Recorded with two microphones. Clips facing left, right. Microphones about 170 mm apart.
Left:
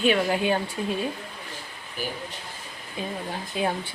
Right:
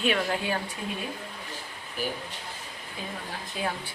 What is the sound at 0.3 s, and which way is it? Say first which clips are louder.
Speech: left 5 dB; 20° left (ahead or behind).